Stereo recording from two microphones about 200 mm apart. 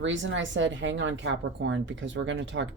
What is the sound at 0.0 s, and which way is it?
A woman's voice, 70° right (ahead or behind).